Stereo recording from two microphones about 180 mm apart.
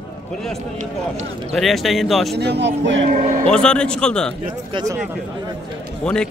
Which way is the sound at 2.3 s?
70° right (ahead or behind).